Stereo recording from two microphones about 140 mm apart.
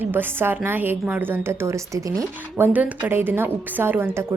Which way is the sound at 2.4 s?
15° right (ahead or behind).